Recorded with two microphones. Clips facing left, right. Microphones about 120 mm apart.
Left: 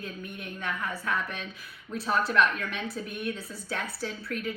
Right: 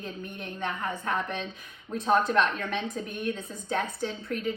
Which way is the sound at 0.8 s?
50° right (ahead or behind).